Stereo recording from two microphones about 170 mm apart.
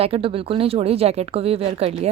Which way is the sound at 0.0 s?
35° right (ahead or behind).